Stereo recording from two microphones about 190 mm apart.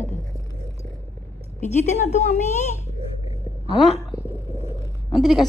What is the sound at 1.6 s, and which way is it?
Speech, 40° left (ahead or behind).